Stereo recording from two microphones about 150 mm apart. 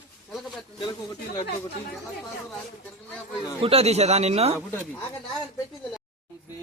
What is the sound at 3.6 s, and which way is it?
Speech, 40° right (ahead or behind).